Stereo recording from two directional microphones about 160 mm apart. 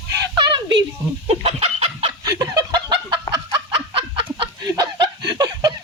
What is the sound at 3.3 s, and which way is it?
Chicken, 30° right (ahead or behind).